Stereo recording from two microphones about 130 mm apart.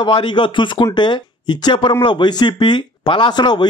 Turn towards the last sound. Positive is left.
turn(degrees=35)  # may be behind; listen again after turning